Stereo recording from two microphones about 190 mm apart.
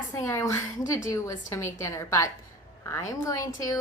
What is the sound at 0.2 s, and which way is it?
A woman's voice, 15° left (ahead or behind).